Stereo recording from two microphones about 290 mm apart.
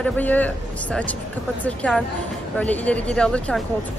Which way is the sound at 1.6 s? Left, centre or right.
Centre.